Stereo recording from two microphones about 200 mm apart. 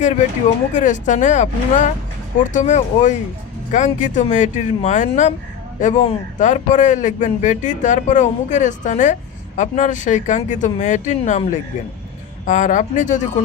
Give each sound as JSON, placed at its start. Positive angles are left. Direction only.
{"t": 0.7, "sound": "speech", "side_deg": 40}
{"t": 12.5, "sound": "speech", "side_deg": 40}